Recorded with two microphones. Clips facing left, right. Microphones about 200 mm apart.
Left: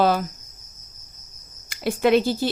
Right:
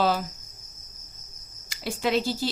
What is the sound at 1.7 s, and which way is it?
Speech, 55° left (ahead or behind).